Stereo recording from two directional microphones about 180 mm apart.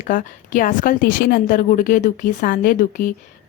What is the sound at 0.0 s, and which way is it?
A woman's voice, 45° left (ahead or behind).